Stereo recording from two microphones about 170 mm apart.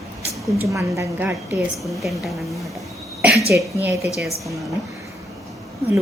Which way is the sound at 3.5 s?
15° right (ahead or behind).